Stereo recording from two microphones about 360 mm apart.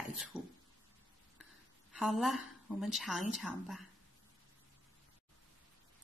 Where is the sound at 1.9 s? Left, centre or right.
Centre.